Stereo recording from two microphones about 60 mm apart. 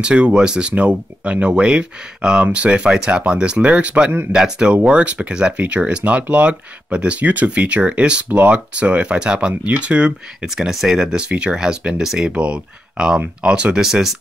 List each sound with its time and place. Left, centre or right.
0.0 s speech: centre
10.7 s speech: centre